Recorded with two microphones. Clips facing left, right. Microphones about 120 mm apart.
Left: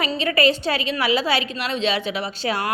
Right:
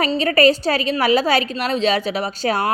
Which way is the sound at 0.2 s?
40° right (ahead or behind).